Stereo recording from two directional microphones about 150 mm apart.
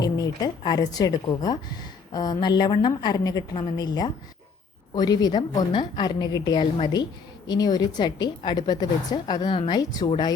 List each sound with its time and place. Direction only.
0.0 s a woman's voice: 25° left (ahead or behind)